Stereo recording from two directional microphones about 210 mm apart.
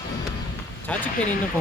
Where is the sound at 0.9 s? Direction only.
5° left (ahead or behind).